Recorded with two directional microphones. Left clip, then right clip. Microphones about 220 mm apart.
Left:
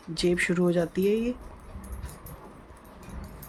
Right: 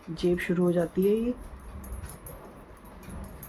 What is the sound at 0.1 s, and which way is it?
Speech, 45° left (ahead or behind).